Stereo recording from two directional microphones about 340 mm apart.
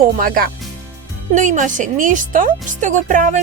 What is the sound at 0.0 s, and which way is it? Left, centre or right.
Speech, right.